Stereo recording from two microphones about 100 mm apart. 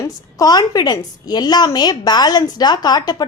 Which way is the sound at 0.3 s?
40° left (ahead or behind).